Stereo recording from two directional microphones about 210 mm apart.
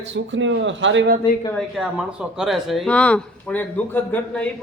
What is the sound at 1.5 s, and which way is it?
A man's voice, centre (ahead or behind).